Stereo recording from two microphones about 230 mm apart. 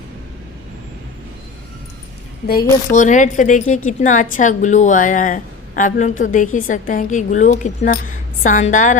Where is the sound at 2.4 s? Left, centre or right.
Left.